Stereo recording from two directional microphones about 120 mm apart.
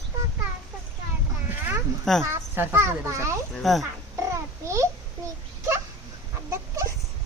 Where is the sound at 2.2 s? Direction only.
20° right (ahead or behind).